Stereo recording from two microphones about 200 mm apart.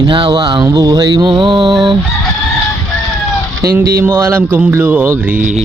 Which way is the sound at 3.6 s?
15° right (ahead or behind).